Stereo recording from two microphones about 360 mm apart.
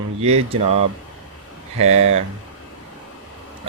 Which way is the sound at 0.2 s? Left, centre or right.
Centre.